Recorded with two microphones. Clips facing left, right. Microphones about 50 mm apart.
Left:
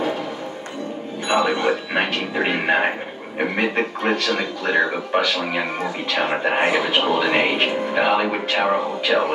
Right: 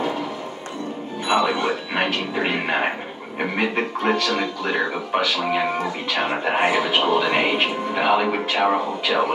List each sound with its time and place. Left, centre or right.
1.3 s speech: centre
5.1 s speech: centre
6.4 s speech: centre